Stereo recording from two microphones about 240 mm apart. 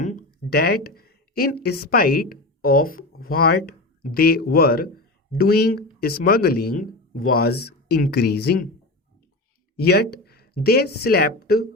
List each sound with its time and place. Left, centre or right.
0.0 s speech: left
9.7 s speech: left